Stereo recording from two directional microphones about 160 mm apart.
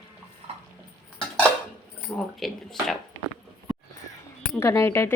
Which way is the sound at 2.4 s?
Centre (ahead or behind).